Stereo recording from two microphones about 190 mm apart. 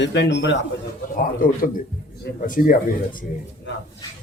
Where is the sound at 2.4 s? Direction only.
45° left (ahead or behind).